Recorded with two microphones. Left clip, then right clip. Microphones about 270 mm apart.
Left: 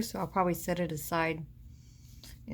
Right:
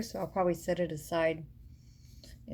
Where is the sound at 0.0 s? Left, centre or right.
Left.